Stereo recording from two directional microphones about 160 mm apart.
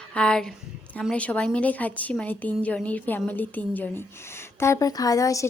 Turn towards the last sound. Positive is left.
turn(degrees=20)  # may be behind; listen again after turning